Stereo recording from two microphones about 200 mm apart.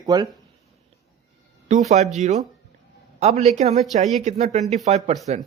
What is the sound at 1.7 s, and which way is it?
Speech, 35° right (ahead or behind).